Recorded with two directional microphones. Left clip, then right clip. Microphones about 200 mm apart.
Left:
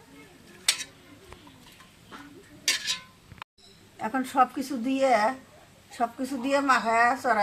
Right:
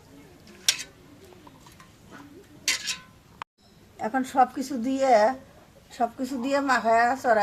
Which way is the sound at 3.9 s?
25° right (ahead or behind).